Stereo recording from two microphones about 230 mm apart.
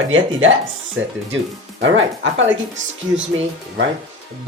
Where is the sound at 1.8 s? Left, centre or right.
Right.